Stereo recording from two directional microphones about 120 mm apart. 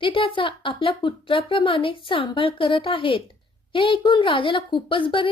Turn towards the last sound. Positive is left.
turn(degrees=45)  # may be behind; listen again after turning